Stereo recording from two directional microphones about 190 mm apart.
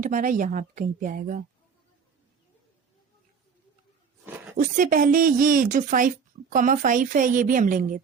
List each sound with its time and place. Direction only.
0.0 s a woman's voice: 45° right (ahead or behind)
4.5 s a woman's voice: 45° right (ahead or behind)